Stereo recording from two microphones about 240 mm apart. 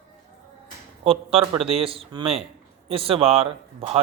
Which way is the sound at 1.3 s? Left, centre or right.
Centre.